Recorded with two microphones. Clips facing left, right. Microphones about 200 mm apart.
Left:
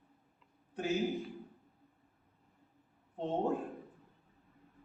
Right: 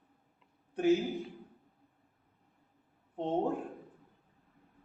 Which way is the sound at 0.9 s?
Centre (ahead or behind).